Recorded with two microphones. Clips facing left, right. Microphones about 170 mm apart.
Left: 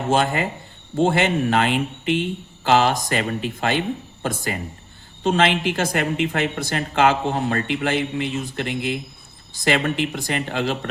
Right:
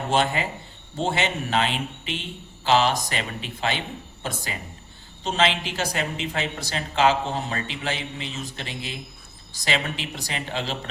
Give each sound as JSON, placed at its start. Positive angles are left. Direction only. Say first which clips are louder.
{"t": 0.1, "sound": "speech", "louder": "left 3 dB", "side_deg": 45}